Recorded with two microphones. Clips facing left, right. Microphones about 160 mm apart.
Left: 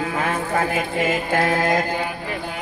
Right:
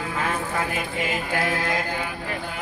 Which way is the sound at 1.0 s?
45° left (ahead or behind).